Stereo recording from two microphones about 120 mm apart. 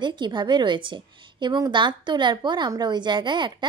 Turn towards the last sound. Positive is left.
turn(degrees=-40)  # may be behind; listen again after turning